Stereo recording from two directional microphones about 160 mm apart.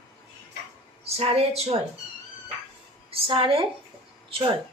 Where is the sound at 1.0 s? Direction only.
40° right (ahead or behind).